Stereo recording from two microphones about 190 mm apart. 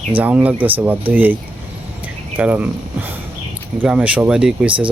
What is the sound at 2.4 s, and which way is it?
Speech, 10° right (ahead or behind).